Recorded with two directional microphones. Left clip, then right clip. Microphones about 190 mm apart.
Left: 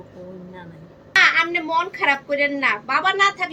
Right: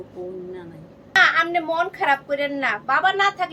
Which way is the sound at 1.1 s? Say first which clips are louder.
Left 1 dB; 20° right (ahead or behind).